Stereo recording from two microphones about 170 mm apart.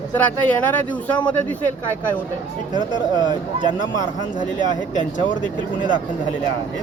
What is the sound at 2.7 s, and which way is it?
Speech, 25° right (ahead or behind).